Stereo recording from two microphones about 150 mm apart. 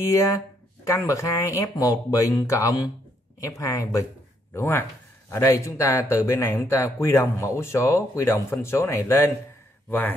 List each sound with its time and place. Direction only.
0.1 s a man's voice: 20° left (ahead or behind)